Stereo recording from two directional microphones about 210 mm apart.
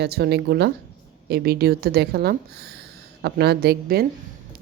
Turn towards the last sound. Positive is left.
turn(degrees=-50)  # may be behind; listen again after turning